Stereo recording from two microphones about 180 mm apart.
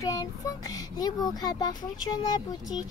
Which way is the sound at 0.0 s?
20° left (ahead or behind).